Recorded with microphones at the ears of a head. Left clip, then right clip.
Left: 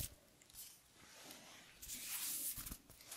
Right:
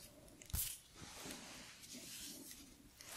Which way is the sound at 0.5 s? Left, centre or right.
Right.